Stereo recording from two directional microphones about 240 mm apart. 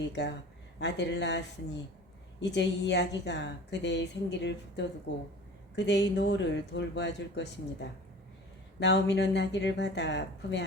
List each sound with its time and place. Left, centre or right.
0.1 s a woman's voice: left